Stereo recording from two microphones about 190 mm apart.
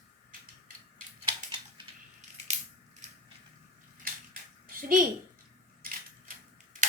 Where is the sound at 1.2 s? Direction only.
25° right (ahead or behind).